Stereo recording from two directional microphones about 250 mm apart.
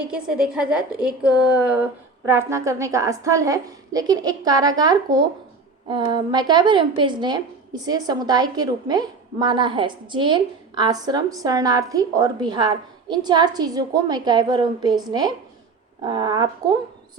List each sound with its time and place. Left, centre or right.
0.0 s a woman's voice: centre